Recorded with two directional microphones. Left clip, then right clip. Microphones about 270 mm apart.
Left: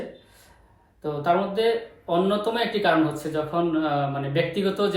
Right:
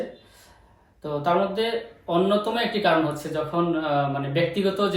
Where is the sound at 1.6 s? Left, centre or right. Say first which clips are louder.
Left 3 dB; centre.